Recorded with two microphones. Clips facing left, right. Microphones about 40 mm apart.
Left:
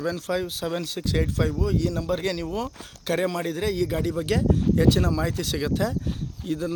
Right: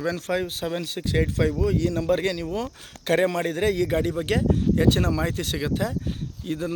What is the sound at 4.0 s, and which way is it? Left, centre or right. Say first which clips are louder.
Speech: right 1 dB; right.